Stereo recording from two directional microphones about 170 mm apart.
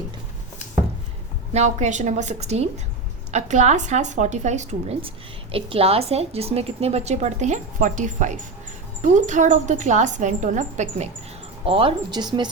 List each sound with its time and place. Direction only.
1.5 s a woman's voice: 45° right (ahead or behind); by 12.5 s 25° right (ahead or behind)